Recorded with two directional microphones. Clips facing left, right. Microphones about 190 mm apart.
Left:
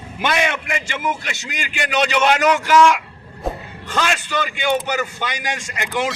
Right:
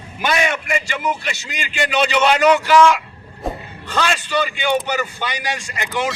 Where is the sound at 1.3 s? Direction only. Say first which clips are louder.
Right 2 dB; 10° left (ahead or behind).